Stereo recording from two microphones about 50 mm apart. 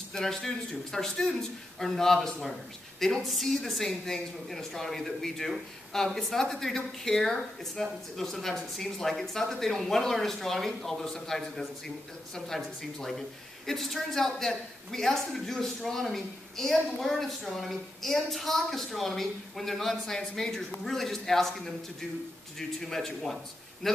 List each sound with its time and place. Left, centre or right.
0.1 s a man's voice: centre